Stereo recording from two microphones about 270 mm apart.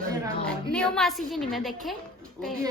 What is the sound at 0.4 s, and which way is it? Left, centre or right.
Speech, centre.